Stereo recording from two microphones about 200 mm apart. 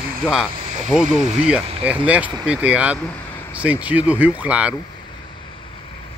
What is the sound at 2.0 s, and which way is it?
Speech, 5° right (ahead or behind).